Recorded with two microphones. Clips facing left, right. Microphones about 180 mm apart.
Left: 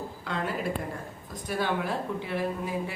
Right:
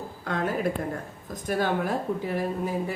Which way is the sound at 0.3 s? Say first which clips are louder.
Right 4 dB; 45° right (ahead or behind).